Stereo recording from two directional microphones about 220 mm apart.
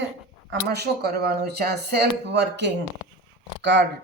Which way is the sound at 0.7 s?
45° right (ahead or behind).